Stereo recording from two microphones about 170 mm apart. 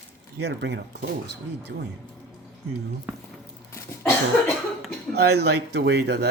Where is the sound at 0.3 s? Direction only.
85° right.